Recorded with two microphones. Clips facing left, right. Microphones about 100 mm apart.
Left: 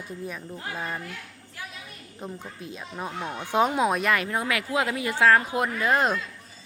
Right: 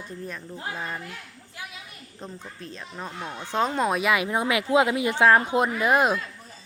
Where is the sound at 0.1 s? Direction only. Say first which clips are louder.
Left 2 dB; 10° left (ahead or behind).